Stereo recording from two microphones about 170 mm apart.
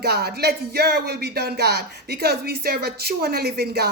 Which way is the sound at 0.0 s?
70° right (ahead or behind).